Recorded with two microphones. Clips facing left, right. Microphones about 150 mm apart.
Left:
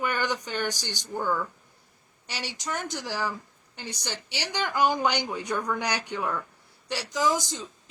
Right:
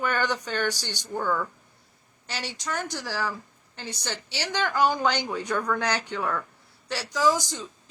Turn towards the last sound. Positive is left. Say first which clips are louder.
# right 2 dB
turn(degrees=20)  # may be behind; listen again after turning